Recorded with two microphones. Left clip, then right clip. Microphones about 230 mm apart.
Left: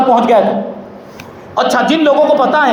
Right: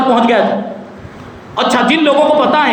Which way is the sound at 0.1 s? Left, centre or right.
Centre.